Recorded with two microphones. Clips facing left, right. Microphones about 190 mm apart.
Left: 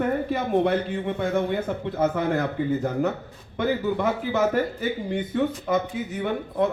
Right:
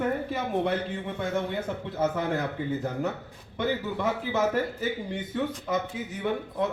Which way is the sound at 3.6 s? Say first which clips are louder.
Left 4 dB; 60° left (ahead or behind).